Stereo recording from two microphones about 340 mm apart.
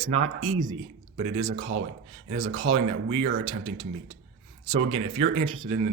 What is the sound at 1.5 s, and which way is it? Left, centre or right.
Speech, right.